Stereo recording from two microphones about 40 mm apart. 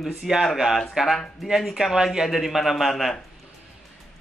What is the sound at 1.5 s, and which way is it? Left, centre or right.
Speech, centre.